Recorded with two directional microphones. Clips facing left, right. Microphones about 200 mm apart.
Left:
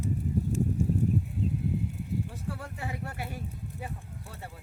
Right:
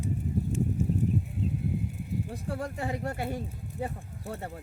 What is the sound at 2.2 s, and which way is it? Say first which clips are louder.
Speech: right 4 dB; 40° right (ahead or behind).